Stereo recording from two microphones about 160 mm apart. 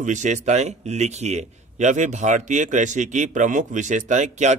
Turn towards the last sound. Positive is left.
turn(degrees=-50)  # may be behind; listen again after turning